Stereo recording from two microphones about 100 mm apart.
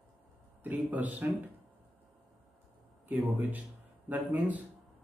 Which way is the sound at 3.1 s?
15° right (ahead or behind).